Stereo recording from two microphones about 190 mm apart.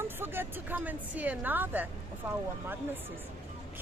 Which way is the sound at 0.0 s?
10° right (ahead or behind).